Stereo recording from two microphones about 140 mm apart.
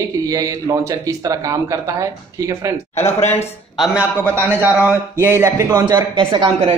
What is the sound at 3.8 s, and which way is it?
A man's voice, 10° right (ahead or behind).